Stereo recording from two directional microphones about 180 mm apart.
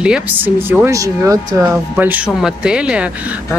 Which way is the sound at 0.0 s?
10° right (ahead or behind).